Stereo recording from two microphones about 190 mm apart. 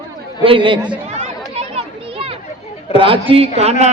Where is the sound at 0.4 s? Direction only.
25° right (ahead or behind).